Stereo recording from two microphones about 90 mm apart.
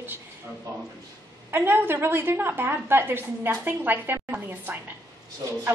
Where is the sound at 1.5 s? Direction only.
25° right (ahead or behind).